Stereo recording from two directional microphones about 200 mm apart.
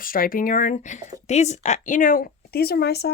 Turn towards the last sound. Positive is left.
turn(degrees=55)  # may be behind; listen again after turning